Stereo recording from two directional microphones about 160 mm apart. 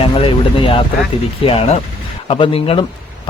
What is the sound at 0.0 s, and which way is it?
A man's voice, 35° left (ahead or behind).